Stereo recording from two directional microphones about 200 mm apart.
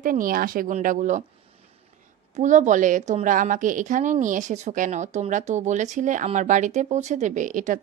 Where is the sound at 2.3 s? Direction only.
40° right (ahead or behind).